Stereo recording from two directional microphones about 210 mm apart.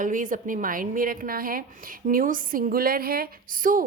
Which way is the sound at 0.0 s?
40° right (ahead or behind).